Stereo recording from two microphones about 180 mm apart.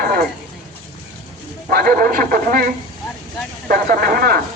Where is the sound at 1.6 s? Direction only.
55° right (ahead or behind).